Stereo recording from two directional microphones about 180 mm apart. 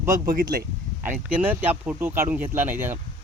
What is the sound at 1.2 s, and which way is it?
Speech, 10° right (ahead or behind).